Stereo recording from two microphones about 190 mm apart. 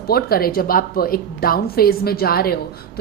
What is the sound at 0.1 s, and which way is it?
A woman's voice, 55° left (ahead or behind).